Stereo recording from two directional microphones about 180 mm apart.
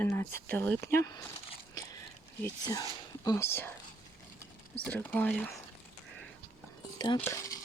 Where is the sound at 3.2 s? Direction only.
15° left (ahead or behind).